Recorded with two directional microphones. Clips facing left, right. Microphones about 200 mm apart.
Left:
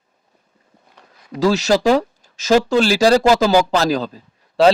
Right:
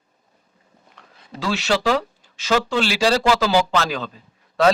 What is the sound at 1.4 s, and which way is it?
Speech, 40° left (ahead or behind).